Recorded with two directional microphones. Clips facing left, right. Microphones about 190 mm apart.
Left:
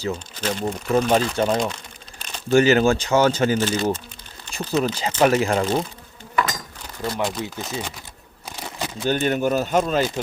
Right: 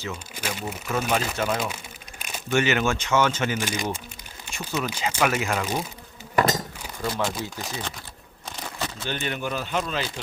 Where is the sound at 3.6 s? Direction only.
15° right (ahead or behind).